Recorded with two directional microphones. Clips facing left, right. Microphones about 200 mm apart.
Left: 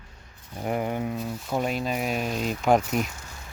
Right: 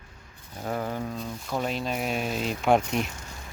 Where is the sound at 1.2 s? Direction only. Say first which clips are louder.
Left 3 dB; 5° left (ahead or behind).